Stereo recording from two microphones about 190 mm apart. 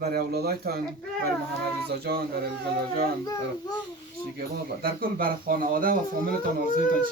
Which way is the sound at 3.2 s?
20° left (ahead or behind).